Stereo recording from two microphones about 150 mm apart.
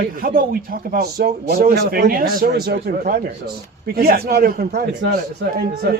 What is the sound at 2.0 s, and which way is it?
A man's voice, 75° right (ahead or behind).